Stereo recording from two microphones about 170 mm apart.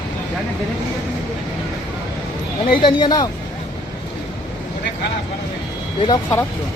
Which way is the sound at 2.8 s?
25° left (ahead or behind).